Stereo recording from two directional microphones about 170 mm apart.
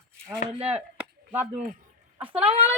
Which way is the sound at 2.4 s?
35° right (ahead or behind).